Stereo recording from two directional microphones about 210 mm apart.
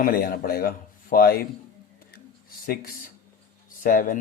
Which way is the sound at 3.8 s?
40° left (ahead or behind).